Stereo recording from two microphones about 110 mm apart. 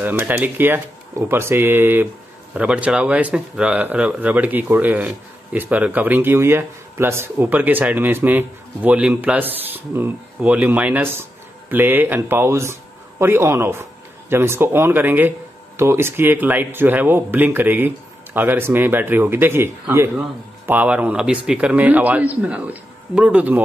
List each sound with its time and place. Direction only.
0.0 s speech: 20° right (ahead or behind)